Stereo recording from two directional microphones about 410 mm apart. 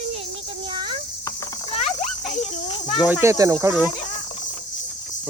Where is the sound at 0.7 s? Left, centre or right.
Centre.